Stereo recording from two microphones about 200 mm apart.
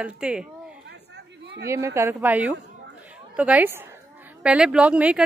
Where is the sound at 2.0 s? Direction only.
10° right (ahead or behind).